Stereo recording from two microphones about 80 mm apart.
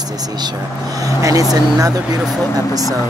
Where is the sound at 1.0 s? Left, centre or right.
Right.